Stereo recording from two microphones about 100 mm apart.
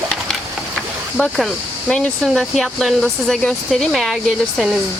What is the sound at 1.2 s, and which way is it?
Speech, centre (ahead or behind).